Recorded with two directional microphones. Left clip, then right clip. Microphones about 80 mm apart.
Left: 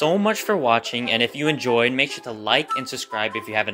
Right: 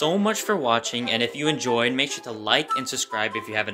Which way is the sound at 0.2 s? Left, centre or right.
Left.